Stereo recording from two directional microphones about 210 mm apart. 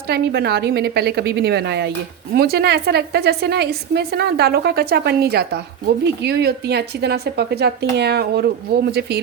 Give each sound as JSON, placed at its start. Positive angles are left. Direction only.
{"t": 0.1, "sound": "a woman's voice", "side_deg": -50}